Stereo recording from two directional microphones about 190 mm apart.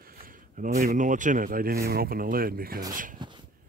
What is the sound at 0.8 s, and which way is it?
Speech, 40° right (ahead or behind).